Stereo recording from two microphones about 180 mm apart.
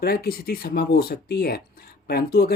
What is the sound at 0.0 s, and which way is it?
Speech, 60° left (ahead or behind).